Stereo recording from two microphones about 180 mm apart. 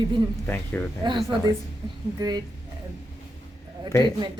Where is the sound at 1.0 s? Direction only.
25° right (ahead or behind).